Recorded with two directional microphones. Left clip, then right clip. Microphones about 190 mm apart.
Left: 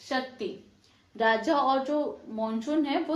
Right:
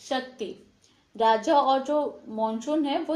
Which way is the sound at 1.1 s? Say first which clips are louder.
Right 4 dB; 45° right (ahead or behind).